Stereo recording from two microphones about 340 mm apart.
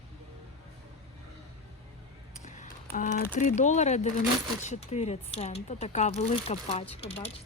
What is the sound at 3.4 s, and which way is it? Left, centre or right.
Speech, left.